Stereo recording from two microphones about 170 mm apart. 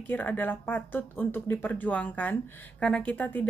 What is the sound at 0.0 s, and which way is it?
A woman's voice, 10° left (ahead or behind).